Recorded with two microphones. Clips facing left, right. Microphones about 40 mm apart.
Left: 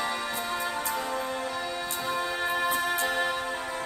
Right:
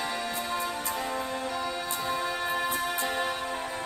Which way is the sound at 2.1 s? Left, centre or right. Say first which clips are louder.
Left 2 dB; left.